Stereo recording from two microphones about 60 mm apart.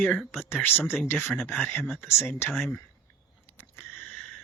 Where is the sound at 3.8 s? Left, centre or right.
Left.